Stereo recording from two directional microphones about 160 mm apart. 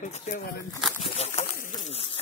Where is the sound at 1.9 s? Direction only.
40° left (ahead or behind).